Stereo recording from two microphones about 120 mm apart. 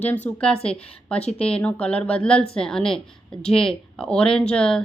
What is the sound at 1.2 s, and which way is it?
Speech, 60° left (ahead or behind).